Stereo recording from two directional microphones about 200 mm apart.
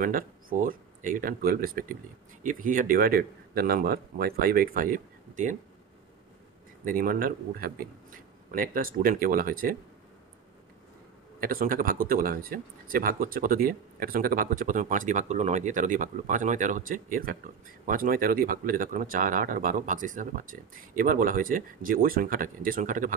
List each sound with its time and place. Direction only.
0.0 s speech: 45° right (ahead or behind)
6.8 s speech: 45° right (ahead or behind)
11.3 s speech: 45° right (ahead or behind)